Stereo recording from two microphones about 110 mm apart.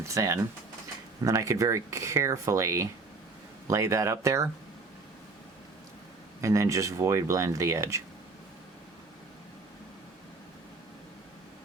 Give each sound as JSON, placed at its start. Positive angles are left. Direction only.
{"t": 0.0, "sound": "speech", "side_deg": -25}
{"t": 6.4, "sound": "speech", "side_deg": -30}